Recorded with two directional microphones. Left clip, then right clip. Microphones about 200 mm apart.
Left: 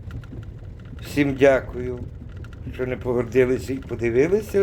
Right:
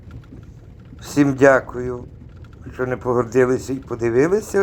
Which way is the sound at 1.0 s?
20° right (ahead or behind).